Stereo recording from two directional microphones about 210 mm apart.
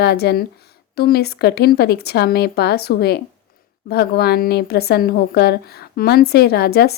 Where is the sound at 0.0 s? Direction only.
50° left (ahead or behind).